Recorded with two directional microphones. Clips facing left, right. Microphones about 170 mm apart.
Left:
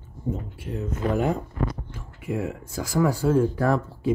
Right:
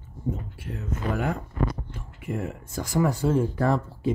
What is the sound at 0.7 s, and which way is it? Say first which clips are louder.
Speech: left 4 dB; 20° left (ahead or behind).